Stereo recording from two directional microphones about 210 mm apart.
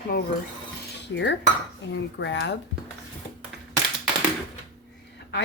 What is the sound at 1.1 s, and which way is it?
Speech, 60° left (ahead or behind).